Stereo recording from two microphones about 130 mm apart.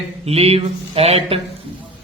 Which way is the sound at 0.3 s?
50° right (ahead or behind).